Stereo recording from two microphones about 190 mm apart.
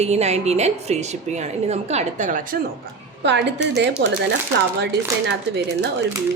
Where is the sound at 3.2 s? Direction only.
65° right (ahead or behind).